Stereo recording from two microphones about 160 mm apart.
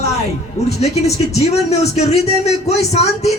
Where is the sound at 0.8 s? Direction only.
45° left (ahead or behind).